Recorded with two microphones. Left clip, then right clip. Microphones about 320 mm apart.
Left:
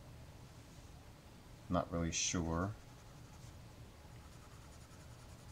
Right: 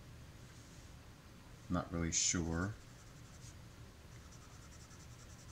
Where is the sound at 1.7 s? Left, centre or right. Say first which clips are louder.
Left 1 dB; centre.